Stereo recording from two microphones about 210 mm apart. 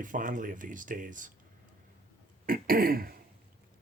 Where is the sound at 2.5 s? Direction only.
45° right (ahead or behind).